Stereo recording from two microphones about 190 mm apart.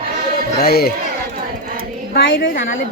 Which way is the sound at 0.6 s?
55° left (ahead or behind).